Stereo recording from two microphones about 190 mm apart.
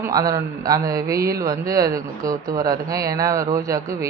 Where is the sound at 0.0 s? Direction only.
20° right (ahead or behind).